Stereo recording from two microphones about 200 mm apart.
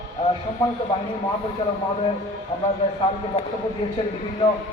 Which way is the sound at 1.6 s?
25° left (ahead or behind).